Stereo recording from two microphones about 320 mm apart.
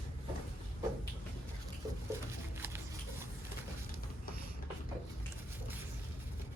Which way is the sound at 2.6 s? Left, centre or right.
Centre.